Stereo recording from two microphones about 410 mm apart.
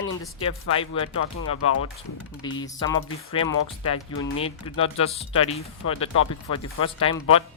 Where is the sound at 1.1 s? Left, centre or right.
Left.